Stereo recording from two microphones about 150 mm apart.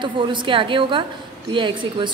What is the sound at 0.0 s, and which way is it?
A woman's voice, 30° right (ahead or behind).